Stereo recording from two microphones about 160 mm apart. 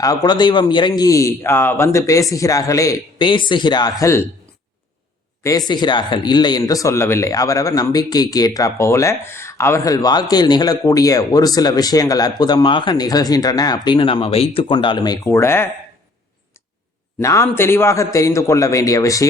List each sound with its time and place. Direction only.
0.0 s a man's voice: 20° left (ahead or behind)
5.4 s a man's voice: 20° left (ahead or behind)
15.2 s speech: 15° left (ahead or behind)
17.2 s a man's voice: 20° left (ahead or behind)